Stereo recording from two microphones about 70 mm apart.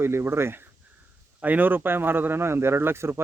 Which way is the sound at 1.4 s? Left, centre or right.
Right.